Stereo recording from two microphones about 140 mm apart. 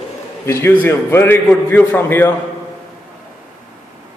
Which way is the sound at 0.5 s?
20° left (ahead or behind).